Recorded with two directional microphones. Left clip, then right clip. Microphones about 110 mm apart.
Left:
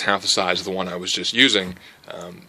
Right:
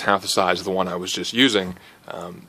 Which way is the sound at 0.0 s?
35° right (ahead or behind).